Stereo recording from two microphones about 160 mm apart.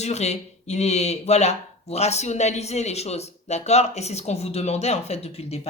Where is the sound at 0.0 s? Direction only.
45° left (ahead or behind).